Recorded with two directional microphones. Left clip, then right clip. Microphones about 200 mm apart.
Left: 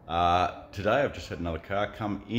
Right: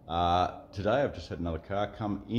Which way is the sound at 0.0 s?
5° left (ahead or behind).